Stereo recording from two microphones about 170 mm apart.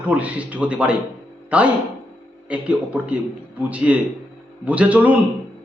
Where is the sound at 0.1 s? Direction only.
10° right (ahead or behind).